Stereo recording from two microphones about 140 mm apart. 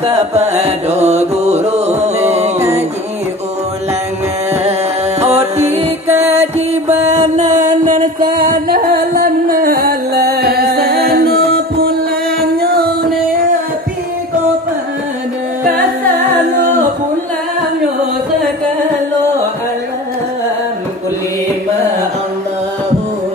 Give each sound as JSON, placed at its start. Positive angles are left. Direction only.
{"t": 0.0, "sound": "music", "side_deg": -50}
{"t": 5.2, "sound": "music", "side_deg": -50}